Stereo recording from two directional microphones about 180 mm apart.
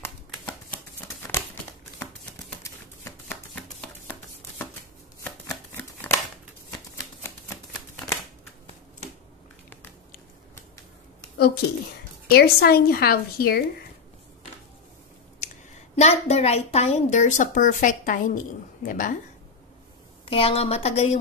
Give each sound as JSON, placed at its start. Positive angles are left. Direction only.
{"t": 1.3, "sound": "crumpling", "side_deg": 15}
{"t": 2.6, "sound": "typewriter", "side_deg": 10}
{"t": 5.5, "sound": "a sound", "side_deg": 15}
{"t": 7.2, "sound": "a sound", "side_deg": 15}
{"t": 12.3, "sound": "speech", "side_deg": 60}
{"t": 16.0, "sound": "a woman's voice", "side_deg": 40}
{"t": 20.2, "sound": "a woman's voice", "side_deg": 30}